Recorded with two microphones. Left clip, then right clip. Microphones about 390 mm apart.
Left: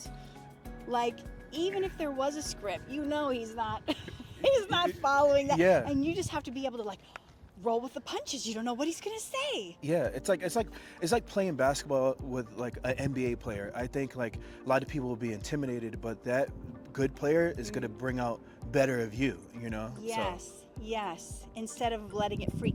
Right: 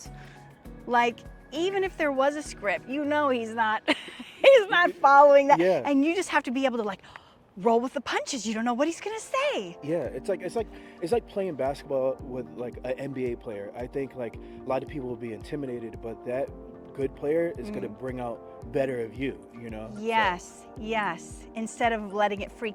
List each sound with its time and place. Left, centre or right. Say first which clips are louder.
0.9 s speech: right 8 dB; right
5.5 s speech: right 1 dB; centre
5.8 s speech: right 7 dB; right
9.8 s speech: left 1 dB; left
20.0 s speech: right 11 dB; right